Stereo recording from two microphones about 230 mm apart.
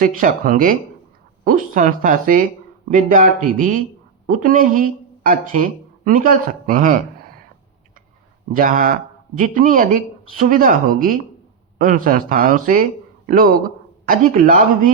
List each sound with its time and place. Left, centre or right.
0.0 s speech: right
8.5 s speech: right